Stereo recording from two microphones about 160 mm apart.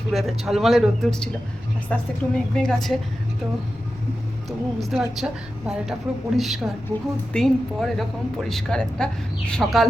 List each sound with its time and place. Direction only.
0.1 s speech: centre (ahead or behind)
4.4 s speech: centre (ahead or behind)
6.9 s a woman's voice: 25° right (ahead or behind)
7.3 s speech: centre (ahead or behind)